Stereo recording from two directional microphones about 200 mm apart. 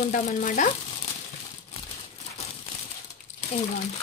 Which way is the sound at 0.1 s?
40° left (ahead or behind).